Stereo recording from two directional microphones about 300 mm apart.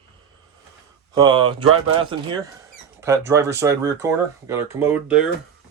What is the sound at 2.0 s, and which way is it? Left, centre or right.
Speech, centre.